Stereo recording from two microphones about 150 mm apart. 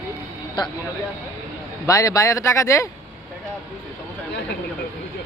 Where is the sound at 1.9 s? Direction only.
20° left (ahead or behind).